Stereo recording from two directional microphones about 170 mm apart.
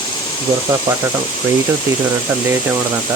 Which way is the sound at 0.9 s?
25° right (ahead or behind).